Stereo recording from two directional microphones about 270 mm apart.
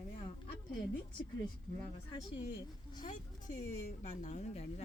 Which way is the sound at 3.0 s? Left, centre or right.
Left.